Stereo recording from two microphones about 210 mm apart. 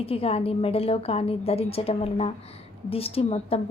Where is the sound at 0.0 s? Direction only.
30° left (ahead or behind).